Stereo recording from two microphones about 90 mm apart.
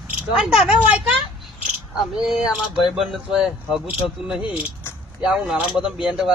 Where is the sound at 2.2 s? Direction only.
5° right (ahead or behind).